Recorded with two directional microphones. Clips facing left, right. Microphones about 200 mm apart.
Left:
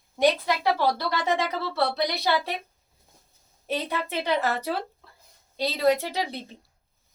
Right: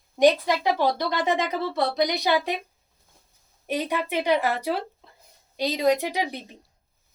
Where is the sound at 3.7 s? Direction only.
15° right (ahead or behind).